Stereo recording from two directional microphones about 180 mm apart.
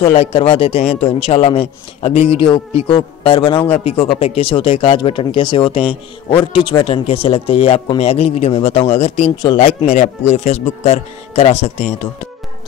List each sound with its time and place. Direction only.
0.0 s a man's voice: 35° left (ahead or behind)